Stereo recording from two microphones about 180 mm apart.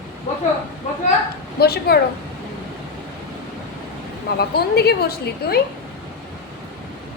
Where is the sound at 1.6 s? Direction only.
60° left (ahead or behind).